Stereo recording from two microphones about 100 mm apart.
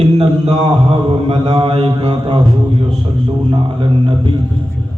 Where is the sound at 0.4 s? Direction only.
90° right; by 1.9 s 65° right (ahead or behind).